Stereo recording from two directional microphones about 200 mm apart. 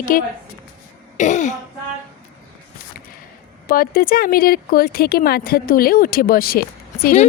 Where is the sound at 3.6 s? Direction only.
45° left (ahead or behind).